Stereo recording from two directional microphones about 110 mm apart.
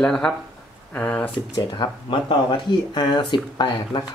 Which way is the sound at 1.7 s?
45° left (ahead or behind).